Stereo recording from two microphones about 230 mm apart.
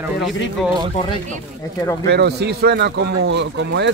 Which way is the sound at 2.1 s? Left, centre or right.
Right.